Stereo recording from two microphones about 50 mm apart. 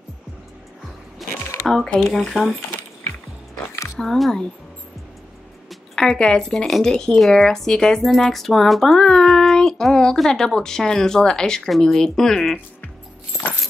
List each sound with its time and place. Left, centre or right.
1.2 s a sound: centre
2.0 s music: centre
4.0 s speech: centre
6.1 s speech: centre
8.0 s music: centre
9.0 s child singing: centre
10.1 s speech: centre